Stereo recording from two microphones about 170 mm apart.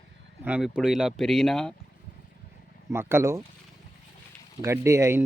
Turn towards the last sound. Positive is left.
turn(degrees=-20)  # may be behind; listen again after turning